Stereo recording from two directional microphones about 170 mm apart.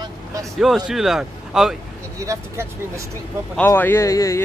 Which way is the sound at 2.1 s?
15° right (ahead or behind).